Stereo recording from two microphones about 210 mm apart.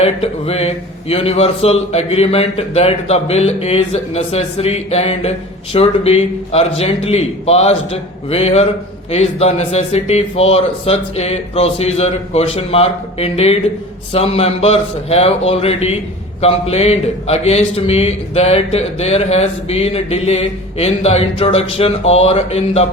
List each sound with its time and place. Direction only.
0.0 s a man's voice: 30° left (ahead or behind)